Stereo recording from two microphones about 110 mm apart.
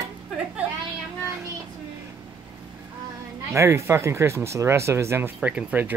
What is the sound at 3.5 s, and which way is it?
Speech, 25° right (ahead or behind).